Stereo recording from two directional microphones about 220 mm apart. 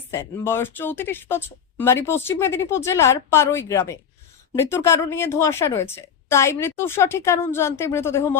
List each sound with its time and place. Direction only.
0.1 s speech: 10° left (ahead or behind)